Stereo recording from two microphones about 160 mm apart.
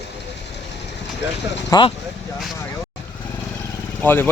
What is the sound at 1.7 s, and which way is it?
Speech, 25° left (ahead or behind).